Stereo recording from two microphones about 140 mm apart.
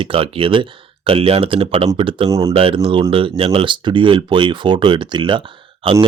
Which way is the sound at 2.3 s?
25° right (ahead or behind).